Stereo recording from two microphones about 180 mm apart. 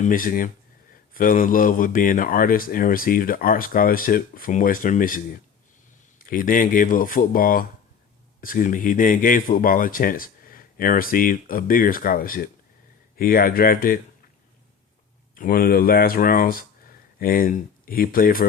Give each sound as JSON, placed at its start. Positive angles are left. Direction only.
{"t": 0.0, "sound": "speech", "side_deg": 50}
{"t": 15.4, "sound": "speech", "side_deg": 55}